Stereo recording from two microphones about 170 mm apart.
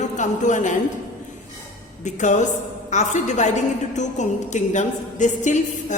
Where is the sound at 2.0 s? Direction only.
45° left (ahead or behind).